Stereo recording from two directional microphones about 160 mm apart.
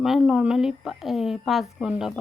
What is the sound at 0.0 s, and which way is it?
A woman's voice, 5° right (ahead or behind).